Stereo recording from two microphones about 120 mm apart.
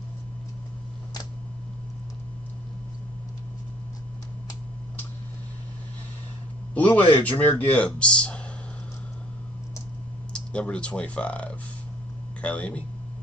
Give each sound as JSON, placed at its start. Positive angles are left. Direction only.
{"t": 6.7, "sound": "speech", "side_deg": 15}
{"t": 10.3, "sound": "speech", "side_deg": 10}